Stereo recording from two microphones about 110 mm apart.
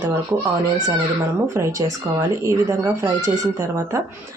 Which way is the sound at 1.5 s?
25° right (ahead or behind).